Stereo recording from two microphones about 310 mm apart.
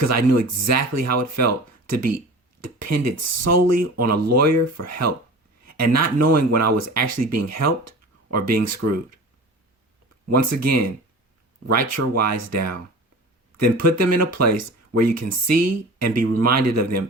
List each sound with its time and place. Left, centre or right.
0.0 s speech: right
10.2 s speech: right